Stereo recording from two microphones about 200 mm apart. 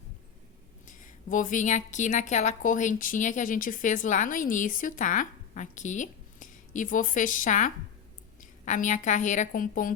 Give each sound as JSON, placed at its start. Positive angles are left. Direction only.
{"t": 0.9, "sound": "a woman's voice", "side_deg": 40}